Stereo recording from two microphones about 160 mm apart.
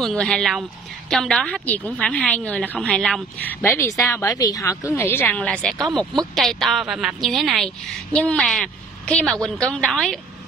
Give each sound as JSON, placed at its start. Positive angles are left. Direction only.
{"t": 0.0, "sound": "a woman's voice", "side_deg": 5}